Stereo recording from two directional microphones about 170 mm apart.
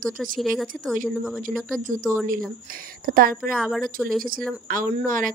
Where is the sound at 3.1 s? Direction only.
55° right (ahead or behind).